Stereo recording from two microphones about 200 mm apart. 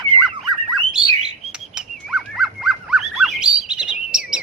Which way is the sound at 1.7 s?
Centre (ahead or behind).